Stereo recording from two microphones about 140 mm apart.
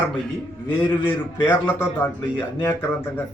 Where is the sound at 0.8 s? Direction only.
15° left (ahead or behind).